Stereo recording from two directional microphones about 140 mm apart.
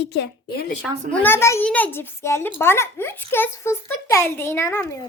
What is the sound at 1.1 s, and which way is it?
A child's voice, 15° left (ahead or behind).